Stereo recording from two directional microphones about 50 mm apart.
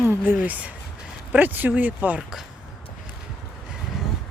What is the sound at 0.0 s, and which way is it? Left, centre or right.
Speech, right.